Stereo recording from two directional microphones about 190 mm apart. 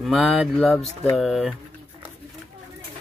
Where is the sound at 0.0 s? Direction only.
Centre (ahead or behind).